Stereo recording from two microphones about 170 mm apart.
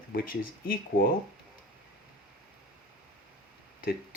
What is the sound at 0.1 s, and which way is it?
Speech, 60° left (ahead or behind).